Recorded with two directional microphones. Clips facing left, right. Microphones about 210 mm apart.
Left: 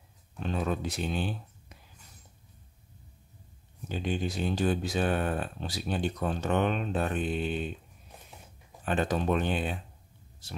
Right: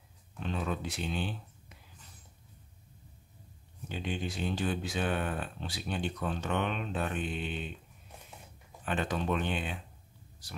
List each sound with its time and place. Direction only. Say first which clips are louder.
0.4 s speech: left 4 dB; 40° left (ahead or behind)
3.9 s speech: left 4 dB; 40° left (ahead or behind)
8.8 s speech: left 4 dB; 40° left (ahead or behind)